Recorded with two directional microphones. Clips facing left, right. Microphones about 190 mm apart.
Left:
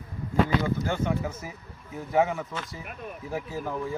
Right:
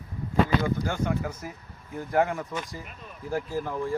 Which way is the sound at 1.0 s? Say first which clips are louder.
Even; 5° left (ahead or behind).